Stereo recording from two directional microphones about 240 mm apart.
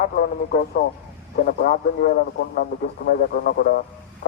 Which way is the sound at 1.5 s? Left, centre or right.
Left.